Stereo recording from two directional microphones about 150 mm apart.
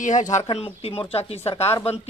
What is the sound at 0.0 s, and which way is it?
Speech, 55° left (ahead or behind).